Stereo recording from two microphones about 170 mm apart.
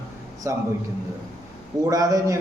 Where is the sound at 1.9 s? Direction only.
20° right (ahead or behind).